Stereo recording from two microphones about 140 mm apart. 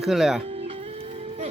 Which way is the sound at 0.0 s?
Centre (ahead or behind).